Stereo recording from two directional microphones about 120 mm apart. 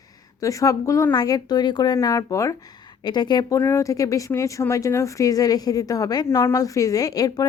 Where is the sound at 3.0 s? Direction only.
35° left (ahead or behind).